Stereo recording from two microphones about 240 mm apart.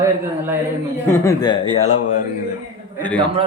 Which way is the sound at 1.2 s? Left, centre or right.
Centre.